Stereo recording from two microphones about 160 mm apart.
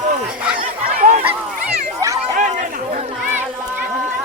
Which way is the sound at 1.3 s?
15° right (ahead or behind).